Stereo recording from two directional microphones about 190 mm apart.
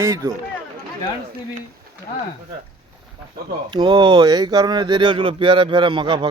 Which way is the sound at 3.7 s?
25° right (ahead or behind).